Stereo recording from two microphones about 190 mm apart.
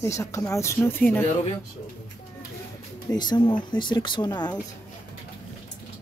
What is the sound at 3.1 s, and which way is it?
Speech, 20° left (ahead or behind).